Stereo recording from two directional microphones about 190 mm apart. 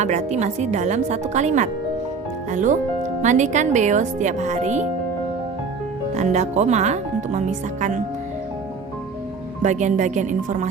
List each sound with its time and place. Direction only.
0.0 s speech: 40° right (ahead or behind)
6.1 s speech: 35° right (ahead or behind)
9.6 s speech: 40° right (ahead or behind)